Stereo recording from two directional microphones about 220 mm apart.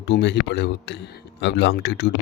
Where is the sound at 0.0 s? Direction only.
55° left (ahead or behind).